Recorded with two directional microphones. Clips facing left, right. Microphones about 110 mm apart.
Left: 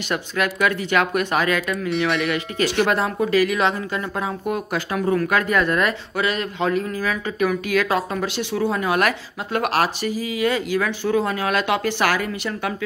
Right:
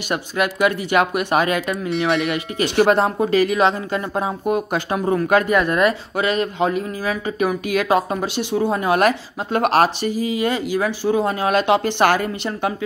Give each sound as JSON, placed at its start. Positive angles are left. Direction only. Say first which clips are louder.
{"t": 0.1, "sound": "speech", "louder": "right 2 dB", "side_deg": -20}
{"t": 2.0, "sound": "speech", "louder": "right 2 dB", "side_deg": -30}
{"t": 2.3, "sound": "speech", "louder": "right 3 dB", "side_deg": -20}
{"t": 8.7, "sound": "speech", "louder": "right 5 dB", "side_deg": -25}